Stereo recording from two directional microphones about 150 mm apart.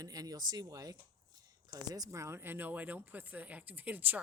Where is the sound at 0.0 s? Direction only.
25° right (ahead or behind).